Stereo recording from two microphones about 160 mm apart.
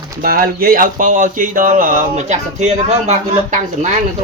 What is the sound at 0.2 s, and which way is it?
Speech, 65° right (ahead or behind).